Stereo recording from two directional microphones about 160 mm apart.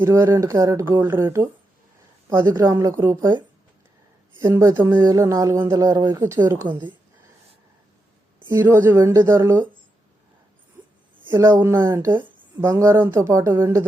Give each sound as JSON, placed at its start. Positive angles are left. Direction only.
{"t": 0.0, "sound": "speech", "side_deg": -15}
{"t": 4.4, "sound": "speech", "side_deg": -20}
{"t": 8.4, "sound": "speech", "side_deg": -15}
{"t": 11.3, "sound": "speech", "side_deg": -20}